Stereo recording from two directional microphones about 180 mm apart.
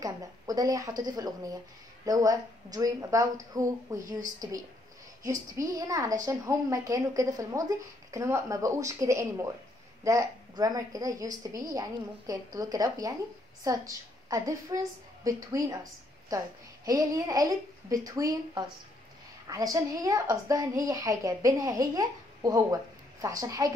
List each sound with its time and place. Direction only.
0.0 s a woman's voice: 20° right (ahead or behind)